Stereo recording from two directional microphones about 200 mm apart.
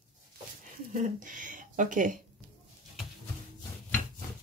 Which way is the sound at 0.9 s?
40° right (ahead or behind).